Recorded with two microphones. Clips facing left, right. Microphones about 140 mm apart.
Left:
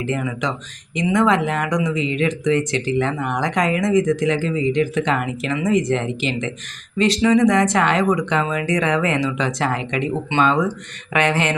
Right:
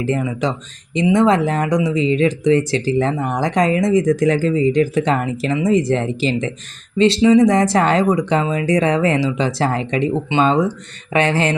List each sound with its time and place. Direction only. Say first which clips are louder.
0.0 s speech: right 4 dB; 35° right (ahead or behind)